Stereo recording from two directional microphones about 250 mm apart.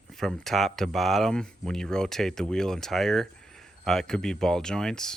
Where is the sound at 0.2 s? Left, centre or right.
Centre.